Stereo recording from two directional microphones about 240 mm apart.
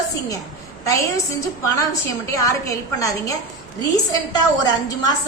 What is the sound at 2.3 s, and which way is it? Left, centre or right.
A woman's voice, centre.